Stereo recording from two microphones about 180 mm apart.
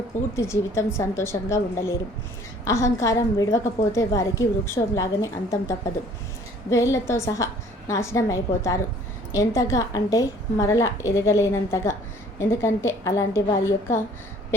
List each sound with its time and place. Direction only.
0.3 s a woman's voice: 15° left (ahead or behind)